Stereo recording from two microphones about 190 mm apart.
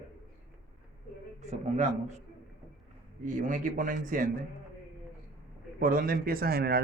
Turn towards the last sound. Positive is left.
turn(degrees=-55)  # may be behind; listen again after turning